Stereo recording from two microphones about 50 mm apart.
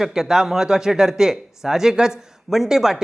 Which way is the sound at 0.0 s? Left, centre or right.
Centre.